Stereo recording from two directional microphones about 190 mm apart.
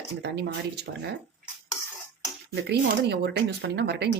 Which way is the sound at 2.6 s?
60° right (ahead or behind).